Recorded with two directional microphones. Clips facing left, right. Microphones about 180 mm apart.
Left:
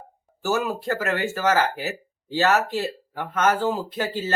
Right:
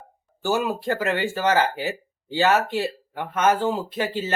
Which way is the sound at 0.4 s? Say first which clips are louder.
Right 1 dB; 15° right (ahead or behind).